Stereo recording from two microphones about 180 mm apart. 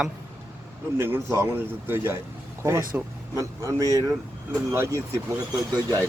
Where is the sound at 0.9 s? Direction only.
15° right (ahead or behind).